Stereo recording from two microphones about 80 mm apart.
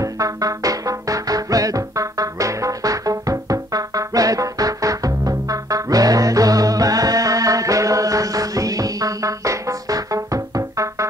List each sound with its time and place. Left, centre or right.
0.0 s music: right